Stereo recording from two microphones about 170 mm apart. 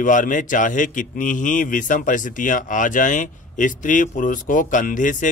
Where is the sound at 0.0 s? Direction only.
50° left (ahead or behind).